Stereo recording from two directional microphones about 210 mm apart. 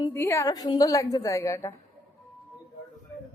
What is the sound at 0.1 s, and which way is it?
A woman's voice, 15° left (ahead or behind).